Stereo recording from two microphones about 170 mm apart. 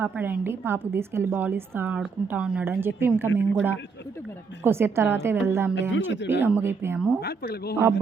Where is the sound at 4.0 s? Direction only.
90° left.